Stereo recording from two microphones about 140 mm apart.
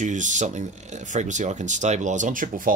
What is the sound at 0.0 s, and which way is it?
Speech, 60° right (ahead or behind).